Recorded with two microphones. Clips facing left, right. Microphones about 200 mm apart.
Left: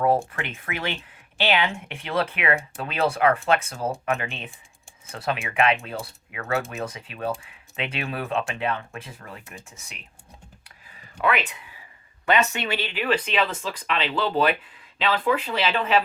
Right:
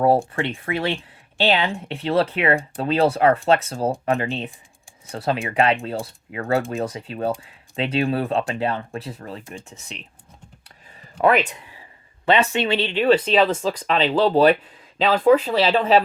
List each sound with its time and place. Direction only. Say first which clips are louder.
0.3 s speech: right 7 dB; 30° right (ahead or behind)
11.2 s speech: right 7 dB; 40° right (ahead or behind)